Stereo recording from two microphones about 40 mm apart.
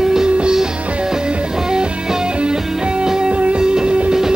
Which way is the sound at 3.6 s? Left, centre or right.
Centre.